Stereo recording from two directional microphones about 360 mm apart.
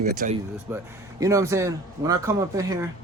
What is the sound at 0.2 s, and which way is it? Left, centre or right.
Speech, right.